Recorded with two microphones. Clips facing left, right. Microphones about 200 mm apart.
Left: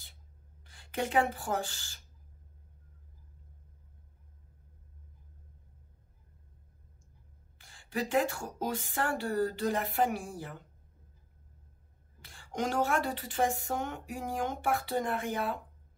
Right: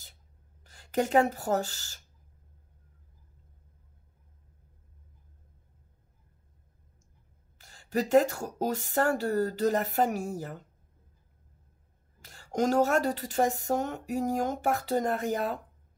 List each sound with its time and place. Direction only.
0.7 s speech: 40° right (ahead or behind)
7.5 s speech: 40° right (ahead or behind)
12.2 s speech: 40° right (ahead or behind)